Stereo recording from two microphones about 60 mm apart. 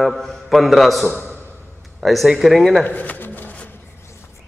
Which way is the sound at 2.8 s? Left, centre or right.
Left.